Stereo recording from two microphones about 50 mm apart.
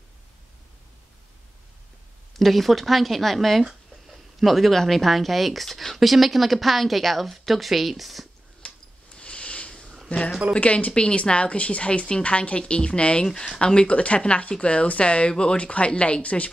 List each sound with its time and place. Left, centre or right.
2.3 s speech: centre
8.6 s a sound: left
10.5 s a woman's voice: left